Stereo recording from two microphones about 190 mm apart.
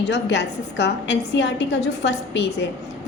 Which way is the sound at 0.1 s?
65° left (ahead or behind).